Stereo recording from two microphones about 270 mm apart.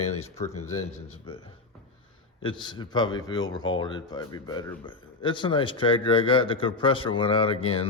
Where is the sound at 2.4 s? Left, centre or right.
Centre.